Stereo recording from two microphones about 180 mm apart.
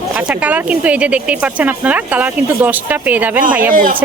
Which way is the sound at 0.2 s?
10° right (ahead or behind).